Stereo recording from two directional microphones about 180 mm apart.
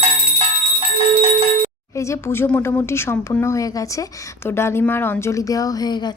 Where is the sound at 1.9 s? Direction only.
15° left (ahead or behind).